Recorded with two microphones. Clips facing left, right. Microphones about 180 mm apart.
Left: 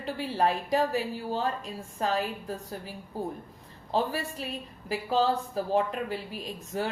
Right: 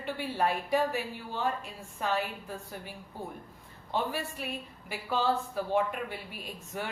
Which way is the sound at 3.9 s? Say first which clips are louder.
Left 4 dB; 35° left (ahead or behind).